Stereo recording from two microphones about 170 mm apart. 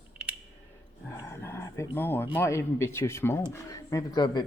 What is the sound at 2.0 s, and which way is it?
Speech, 10° left (ahead or behind).